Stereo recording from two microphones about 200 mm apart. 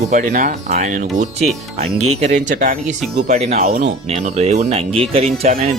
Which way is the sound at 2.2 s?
35° right (ahead or behind).